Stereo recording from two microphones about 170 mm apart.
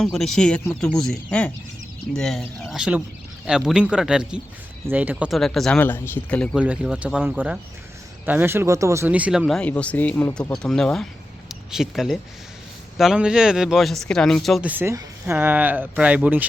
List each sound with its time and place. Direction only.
0.0 s speech: centre (ahead or behind)
6.6 s speech: 5° right (ahead or behind)